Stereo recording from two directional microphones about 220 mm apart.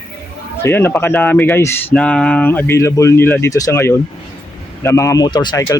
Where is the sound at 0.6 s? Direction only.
10° left (ahead or behind).